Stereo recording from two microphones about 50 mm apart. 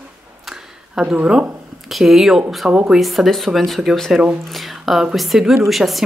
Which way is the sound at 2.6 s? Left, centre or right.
Right.